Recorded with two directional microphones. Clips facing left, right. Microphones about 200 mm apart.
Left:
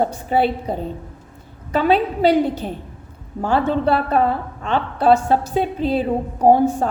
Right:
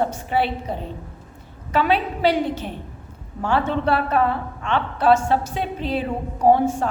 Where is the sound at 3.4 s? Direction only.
40° left (ahead or behind).